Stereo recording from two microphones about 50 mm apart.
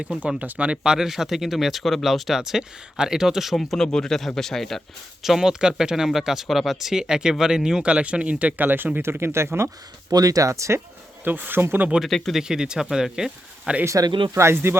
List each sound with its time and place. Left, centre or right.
0.4 s speech: right
0.9 s speech: centre
5.2 s speech: centre; by 8.9 s right
9.0 s speech: right
10.4 s speech: right
11.2 s speech: right
12.0 s speech: centre
12.3 s speech: centre
13.8 s speech: right
14.5 s speech: right